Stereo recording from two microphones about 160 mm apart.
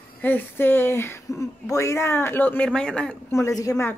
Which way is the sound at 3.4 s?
20° left (ahead or behind).